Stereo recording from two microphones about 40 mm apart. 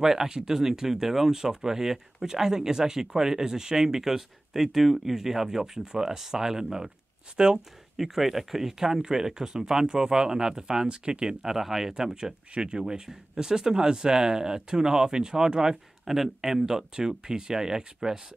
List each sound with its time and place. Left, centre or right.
0.0 s speech: centre
8.1 s speech: centre
11.5 s speech: centre
11.9 s speech: centre